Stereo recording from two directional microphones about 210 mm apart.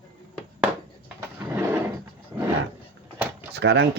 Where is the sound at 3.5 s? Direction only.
55° right (ahead or behind).